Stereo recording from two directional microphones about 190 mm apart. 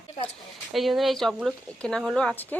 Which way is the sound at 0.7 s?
Centre (ahead or behind).